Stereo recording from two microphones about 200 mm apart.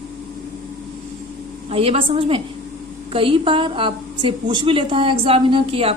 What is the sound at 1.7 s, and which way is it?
A woman's voice, 30° right (ahead or behind).